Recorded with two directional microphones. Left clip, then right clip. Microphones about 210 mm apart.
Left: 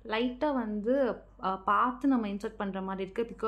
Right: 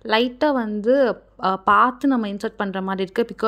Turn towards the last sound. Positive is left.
turn(degrees=-40)  # may be behind; listen again after turning